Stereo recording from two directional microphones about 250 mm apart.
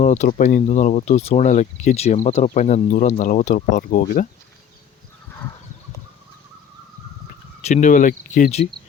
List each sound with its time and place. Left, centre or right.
0.0 s speech: left
7.6 s speech: left